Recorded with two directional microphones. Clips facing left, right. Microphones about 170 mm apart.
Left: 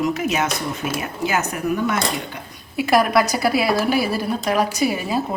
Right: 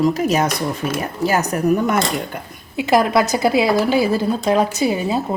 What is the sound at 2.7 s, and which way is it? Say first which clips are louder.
A woman's voice: right 1 dB; 20° right (ahead or behind).